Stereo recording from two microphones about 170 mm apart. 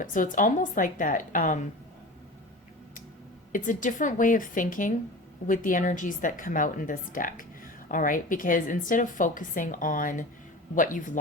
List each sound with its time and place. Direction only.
0.0 s a woman's voice: 50° left (ahead or behind)
3.5 s a woman's voice: 50° left (ahead or behind)